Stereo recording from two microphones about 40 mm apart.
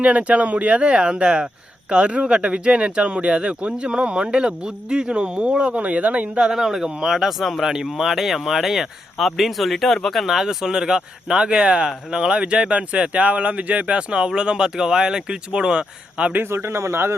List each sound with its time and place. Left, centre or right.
0.0 s speech: right
6.4 s speech: centre
7.6 s speech: centre
16.4 s a man's voice: right